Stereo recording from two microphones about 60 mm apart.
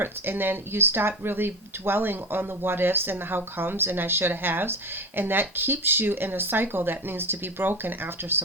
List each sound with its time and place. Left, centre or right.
0.0 s speech: right